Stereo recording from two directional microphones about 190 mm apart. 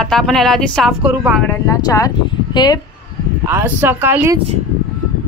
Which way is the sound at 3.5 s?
10° right (ahead or behind).